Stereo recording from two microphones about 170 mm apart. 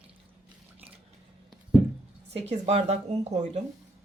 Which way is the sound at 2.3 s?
35° right (ahead or behind).